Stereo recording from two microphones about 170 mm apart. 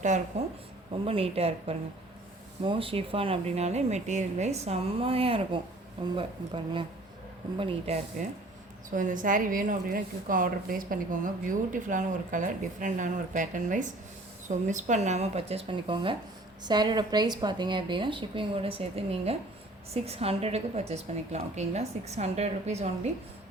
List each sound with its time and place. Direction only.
0.0 s a woman's voice: 45° right (ahead or behind)
1.0 s a woman's voice: 35° right (ahead or behind)
8.2 s a woman's voice: 45° right (ahead or behind)